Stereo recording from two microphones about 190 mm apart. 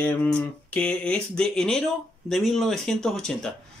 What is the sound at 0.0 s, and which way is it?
Speech, 5° left (ahead or behind).